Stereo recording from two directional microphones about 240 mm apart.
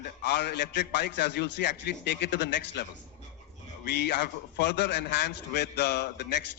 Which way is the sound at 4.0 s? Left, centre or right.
Left.